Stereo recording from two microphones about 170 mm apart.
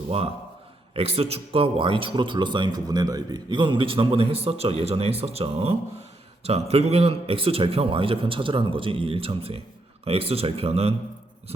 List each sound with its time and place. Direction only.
0.9 s a man's voice: 35° right (ahead or behind)